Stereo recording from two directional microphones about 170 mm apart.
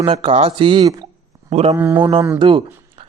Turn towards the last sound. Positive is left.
turn(degrees=-30)  # may be behind; listen again after turning